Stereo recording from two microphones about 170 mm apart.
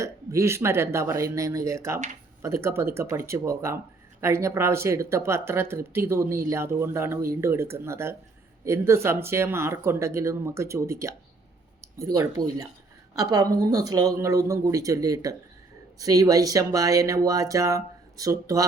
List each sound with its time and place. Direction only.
0.0 s speech: 15° right (ahead or behind)
13.1 s speech: 20° right (ahead or behind)